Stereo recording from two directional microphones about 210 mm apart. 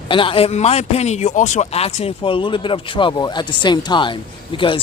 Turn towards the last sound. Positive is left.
turn(degrees=25)  # may be behind; listen again after turning